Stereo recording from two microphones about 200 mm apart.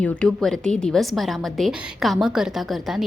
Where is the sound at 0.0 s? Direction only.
5° left (ahead or behind).